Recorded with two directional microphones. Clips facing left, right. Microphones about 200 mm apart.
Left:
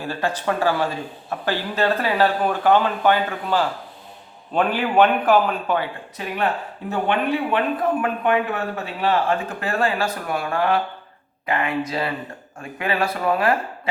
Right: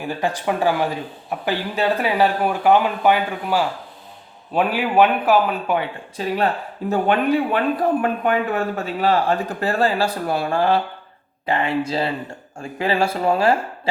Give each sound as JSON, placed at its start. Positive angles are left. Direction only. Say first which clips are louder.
{"t": 0.0, "sound": "a man's voice", "louder": "right 1 dB", "side_deg": -15}
{"t": 6.1, "sound": "speech", "louder": "right 3 dB", "side_deg": -35}